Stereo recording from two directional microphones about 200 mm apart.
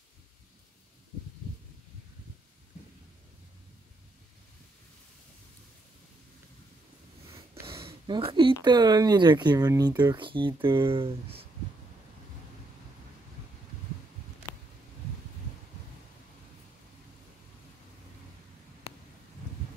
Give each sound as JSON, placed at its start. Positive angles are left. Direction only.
{"t": 8.3, "sound": "speech", "side_deg": -25}